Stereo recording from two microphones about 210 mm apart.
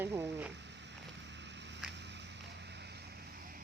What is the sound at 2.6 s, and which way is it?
Vehicle, 50° right (ahead or behind).